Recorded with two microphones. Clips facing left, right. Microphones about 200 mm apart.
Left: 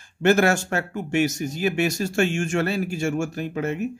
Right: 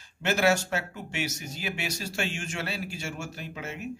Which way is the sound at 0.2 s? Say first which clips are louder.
Left 6 dB; 50° left (ahead or behind).